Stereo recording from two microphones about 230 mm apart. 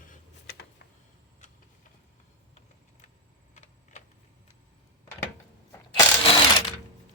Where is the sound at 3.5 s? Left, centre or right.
Left.